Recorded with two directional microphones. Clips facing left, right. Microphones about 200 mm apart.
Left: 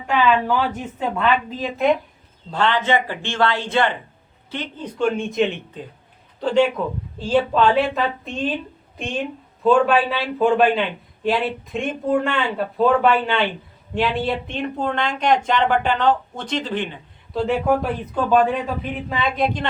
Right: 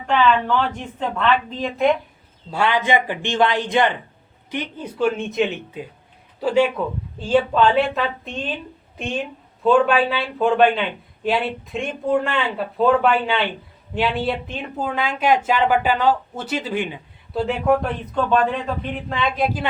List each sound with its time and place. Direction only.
0.1 s speech: 10° left (ahead or behind)
2.5 s speech: 10° right (ahead or behind)
9.6 s speech: centre (ahead or behind)